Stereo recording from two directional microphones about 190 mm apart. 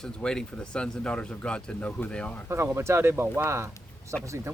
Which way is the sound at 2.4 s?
15° right (ahead or behind).